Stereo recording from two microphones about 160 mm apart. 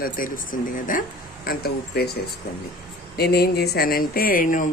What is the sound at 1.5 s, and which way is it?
Speech, 80° left.